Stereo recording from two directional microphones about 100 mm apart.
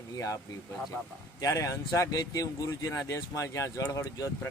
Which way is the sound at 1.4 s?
35° left (ahead or behind).